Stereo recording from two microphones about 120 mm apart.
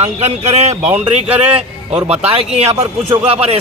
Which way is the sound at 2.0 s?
60° right (ahead or behind).